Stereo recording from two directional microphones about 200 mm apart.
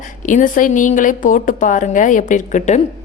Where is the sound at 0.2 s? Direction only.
40° left (ahead or behind).